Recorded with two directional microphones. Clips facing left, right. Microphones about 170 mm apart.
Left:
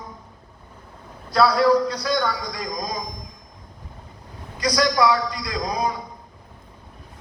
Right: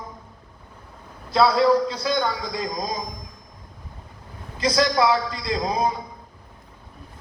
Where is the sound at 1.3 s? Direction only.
25° right (ahead or behind).